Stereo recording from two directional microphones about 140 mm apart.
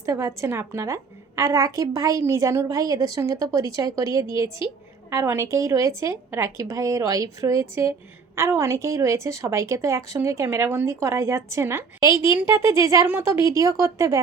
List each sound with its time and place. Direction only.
0.0 s a woman's voice: 20° right (ahead or behind)